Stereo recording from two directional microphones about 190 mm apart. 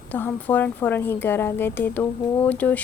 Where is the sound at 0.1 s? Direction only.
10° left (ahead or behind).